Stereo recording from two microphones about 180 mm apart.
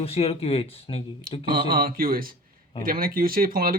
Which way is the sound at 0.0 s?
35° left (ahead or behind).